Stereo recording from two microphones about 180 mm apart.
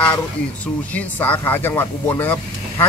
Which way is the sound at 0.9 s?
10° left (ahead or behind).